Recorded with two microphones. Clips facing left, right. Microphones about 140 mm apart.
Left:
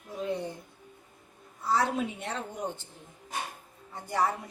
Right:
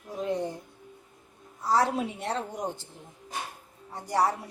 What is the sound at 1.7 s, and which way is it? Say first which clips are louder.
Speech: right 2 dB; 40° right (ahead or behind).